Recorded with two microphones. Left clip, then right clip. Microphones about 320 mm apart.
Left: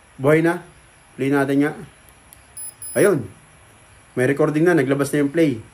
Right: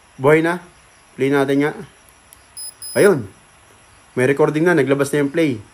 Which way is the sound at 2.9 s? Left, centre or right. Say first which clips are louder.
Right 3 dB; right.